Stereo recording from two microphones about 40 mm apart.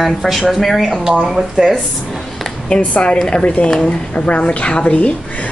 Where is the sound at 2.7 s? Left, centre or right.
Left.